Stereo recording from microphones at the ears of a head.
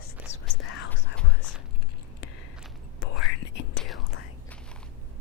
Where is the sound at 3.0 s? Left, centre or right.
Left.